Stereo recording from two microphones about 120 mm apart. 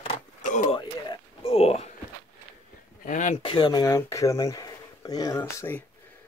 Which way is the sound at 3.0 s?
90° left.